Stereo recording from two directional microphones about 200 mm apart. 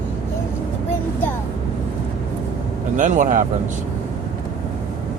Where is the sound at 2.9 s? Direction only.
40° right (ahead or behind).